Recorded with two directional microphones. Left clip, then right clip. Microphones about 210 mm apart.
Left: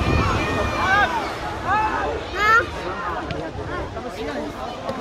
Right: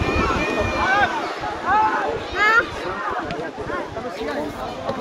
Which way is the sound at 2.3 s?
50° left (ahead or behind).